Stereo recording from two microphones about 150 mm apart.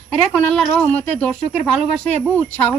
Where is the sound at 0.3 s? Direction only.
5° left (ahead or behind).